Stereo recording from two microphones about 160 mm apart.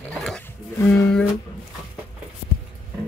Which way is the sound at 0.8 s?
20° left (ahead or behind).